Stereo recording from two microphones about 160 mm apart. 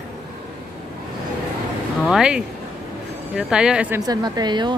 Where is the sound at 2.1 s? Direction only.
5° right (ahead or behind).